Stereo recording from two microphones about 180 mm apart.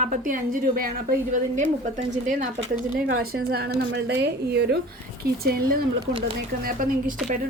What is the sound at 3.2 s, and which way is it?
A woman's voice, 60° right (ahead or behind).